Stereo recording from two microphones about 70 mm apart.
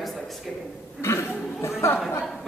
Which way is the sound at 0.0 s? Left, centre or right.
Centre.